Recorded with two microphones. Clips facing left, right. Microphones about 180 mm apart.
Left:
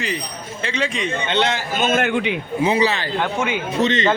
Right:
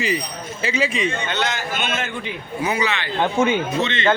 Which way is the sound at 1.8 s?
45° left (ahead or behind).